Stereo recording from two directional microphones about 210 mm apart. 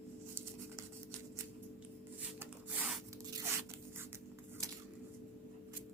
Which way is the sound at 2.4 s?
10° right (ahead or behind).